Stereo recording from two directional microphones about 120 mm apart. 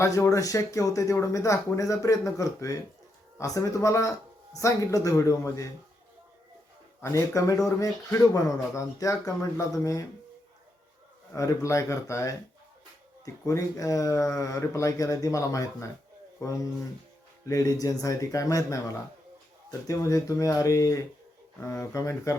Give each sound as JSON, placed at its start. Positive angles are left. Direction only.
{"t": 0.0, "sound": "speech", "side_deg": 25}
{"t": 7.0, "sound": "speech", "side_deg": 25}
{"t": 11.3, "sound": "speech", "side_deg": 25}
{"t": 17.5, "sound": "speech", "side_deg": 30}
{"t": 19.9, "sound": "speech", "side_deg": 30}